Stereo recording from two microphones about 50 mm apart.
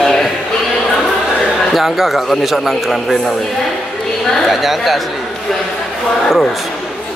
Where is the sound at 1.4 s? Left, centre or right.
Centre.